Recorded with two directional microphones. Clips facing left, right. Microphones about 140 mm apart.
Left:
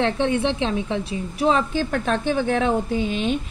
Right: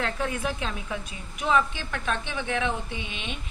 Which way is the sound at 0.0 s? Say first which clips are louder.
Left 8 dB; 25° left (ahead or behind).